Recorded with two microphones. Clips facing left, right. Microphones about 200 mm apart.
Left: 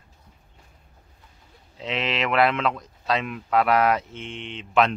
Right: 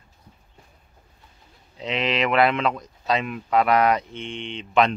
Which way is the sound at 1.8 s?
Centre (ahead or behind).